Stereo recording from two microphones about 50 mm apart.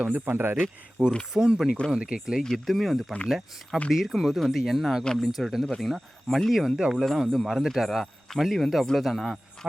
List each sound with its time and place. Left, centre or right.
0.0 s speech: right
1.3 s speech: centre
2.4 s speech: centre
6.7 s speech: centre
7.0 s speech: centre